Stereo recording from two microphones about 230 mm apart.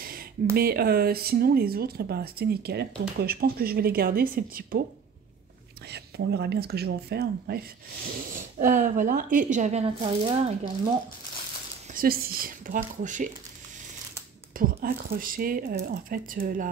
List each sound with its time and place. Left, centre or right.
0.6 s speech: right
5.9 s speech: right
11.9 s speech: right
14.6 s speech: right